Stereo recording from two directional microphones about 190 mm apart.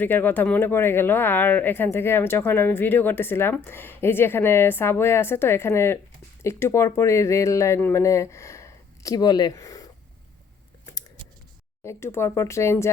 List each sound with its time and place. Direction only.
0.0 s speech: 10° left (ahead or behind)
11.8 s speech: 15° left (ahead or behind)